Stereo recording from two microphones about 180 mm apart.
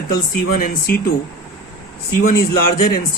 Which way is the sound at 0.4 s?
50° left (ahead or behind).